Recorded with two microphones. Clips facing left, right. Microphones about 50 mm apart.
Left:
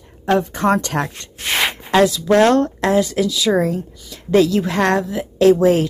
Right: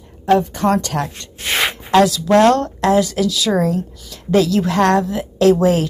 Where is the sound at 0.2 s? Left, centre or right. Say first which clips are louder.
Right 2 dB; centre.